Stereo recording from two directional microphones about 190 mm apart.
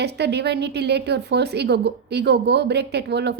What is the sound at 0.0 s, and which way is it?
A woman's voice, 60° right (ahead or behind).